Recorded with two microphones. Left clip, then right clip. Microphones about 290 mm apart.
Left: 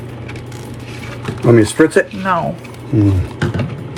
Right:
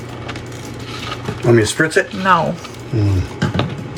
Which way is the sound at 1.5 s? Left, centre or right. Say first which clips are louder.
Left 3 dB; left.